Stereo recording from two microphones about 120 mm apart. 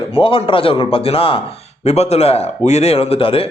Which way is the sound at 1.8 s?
65° left (ahead or behind).